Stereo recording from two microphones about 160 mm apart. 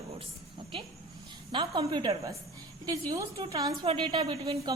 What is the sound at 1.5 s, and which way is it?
A woman's voice, 30° right (ahead or behind).